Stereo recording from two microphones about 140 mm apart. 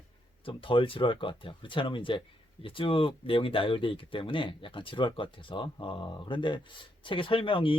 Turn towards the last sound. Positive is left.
turn(degrees=40)  # may be behind; listen again after turning